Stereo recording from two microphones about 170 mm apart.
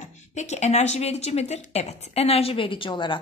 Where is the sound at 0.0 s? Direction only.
45° left (ahead or behind).